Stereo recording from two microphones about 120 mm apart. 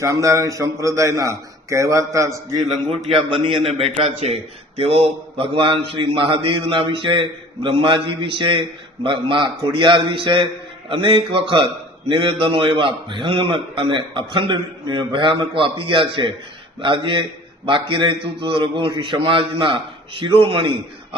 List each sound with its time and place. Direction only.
0.0 s a man's voice: 25° right (ahead or behind)
3.8 s a man's voice: 50° right (ahead or behind)